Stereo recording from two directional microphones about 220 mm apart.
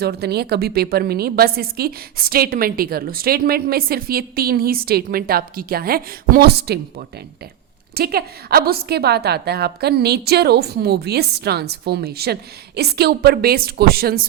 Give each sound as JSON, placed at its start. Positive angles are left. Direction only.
{"t": 0.0, "sound": "a woman's voice", "side_deg": -45}
{"t": 7.9, "sound": "a woman's voice", "side_deg": -45}